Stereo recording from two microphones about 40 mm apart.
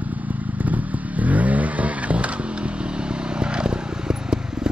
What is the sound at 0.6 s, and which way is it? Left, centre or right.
Vehicle, right.